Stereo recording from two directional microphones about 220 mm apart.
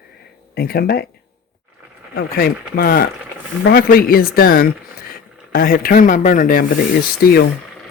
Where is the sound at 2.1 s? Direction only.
45° left (ahead or behind).